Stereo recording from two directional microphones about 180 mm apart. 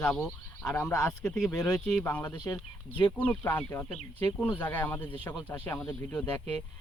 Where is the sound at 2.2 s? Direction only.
20° left (ahead or behind).